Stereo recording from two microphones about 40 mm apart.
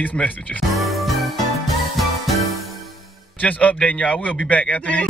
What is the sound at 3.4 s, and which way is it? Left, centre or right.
Speech, left.